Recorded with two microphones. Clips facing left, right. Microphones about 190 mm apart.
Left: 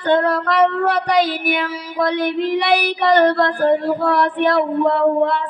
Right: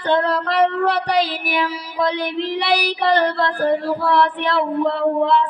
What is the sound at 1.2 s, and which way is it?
Speech, 50° left (ahead or behind).